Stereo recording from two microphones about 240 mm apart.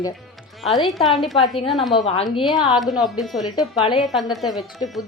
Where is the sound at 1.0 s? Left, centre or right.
Centre.